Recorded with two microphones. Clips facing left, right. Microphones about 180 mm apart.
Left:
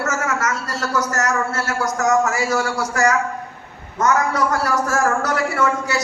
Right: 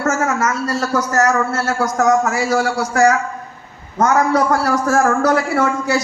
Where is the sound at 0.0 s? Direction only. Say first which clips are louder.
Right 4 dB; 55° right (ahead or behind).